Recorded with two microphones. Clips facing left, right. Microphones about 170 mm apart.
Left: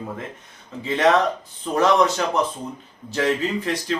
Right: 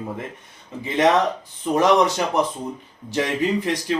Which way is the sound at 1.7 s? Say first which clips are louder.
Right 1 dB; 15° right (ahead or behind).